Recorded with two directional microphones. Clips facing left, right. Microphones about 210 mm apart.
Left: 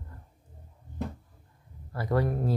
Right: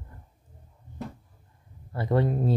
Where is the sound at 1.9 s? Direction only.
25° right (ahead or behind).